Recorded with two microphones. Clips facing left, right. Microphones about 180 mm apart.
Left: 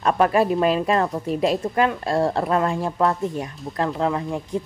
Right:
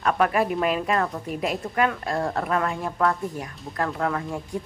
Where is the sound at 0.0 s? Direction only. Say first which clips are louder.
Left 4 dB; 30° left (ahead or behind).